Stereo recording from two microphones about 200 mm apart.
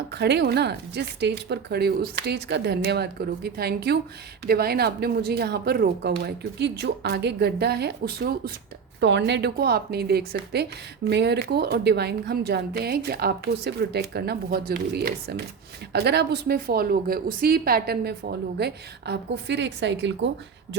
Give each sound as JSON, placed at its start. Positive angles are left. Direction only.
{"t": 0.1, "sound": "a woman's voice", "side_deg": -55}
{"t": 9.0, "sound": "a woman's voice", "side_deg": -60}